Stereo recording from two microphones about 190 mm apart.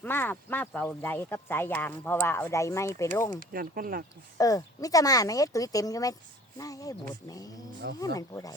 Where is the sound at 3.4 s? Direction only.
50° right (ahead or behind).